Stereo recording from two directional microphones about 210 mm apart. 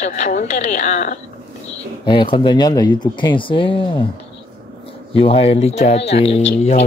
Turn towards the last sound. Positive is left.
turn(degrees=30)  # may be behind; listen again after turning